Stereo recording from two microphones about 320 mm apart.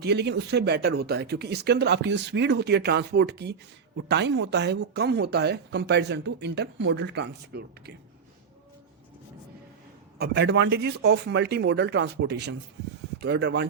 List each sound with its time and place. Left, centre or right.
0.0 s speech: right
10.2 s speech: right